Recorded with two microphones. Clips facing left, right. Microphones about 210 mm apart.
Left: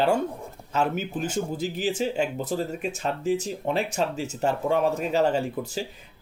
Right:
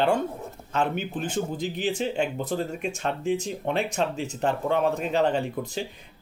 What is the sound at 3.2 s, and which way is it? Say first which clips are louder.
Speech: left 1 dB; 40° left (ahead or behind).